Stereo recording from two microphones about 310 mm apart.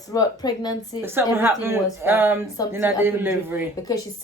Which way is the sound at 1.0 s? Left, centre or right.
Centre.